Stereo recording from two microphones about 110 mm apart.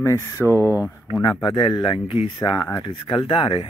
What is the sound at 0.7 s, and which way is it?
Speech, 20° right (ahead or behind).